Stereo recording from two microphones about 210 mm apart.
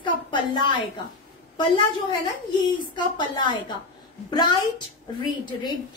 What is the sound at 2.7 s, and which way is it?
A woman's voice, 20° left (ahead or behind).